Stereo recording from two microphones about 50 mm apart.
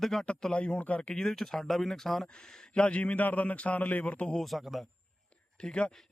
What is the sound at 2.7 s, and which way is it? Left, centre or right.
Speech, left.